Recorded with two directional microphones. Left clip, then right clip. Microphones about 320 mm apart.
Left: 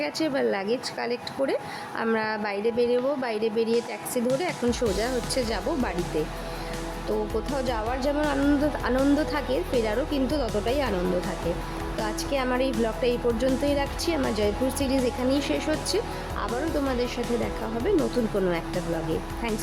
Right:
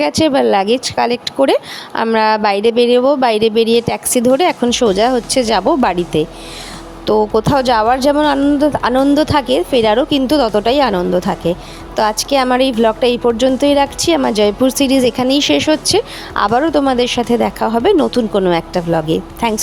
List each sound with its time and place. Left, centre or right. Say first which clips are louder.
0.0 s a woman's voice: right 13 dB; right
7.3 s a woman's voice: right 16 dB; right